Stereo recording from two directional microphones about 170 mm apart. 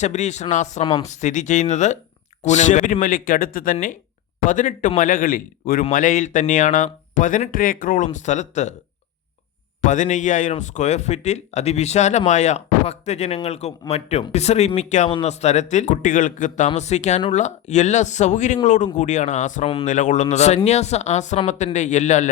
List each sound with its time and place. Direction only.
0.0 s a man's voice: 45° left (ahead or behind)
9.8 s a man's voice: 45° left (ahead or behind)